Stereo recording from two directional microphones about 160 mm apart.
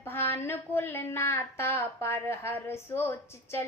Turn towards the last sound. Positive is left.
turn(degrees=15)  # may be behind; listen again after turning